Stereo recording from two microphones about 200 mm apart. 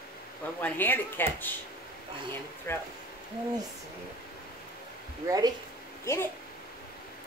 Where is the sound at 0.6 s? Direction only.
10° left (ahead or behind).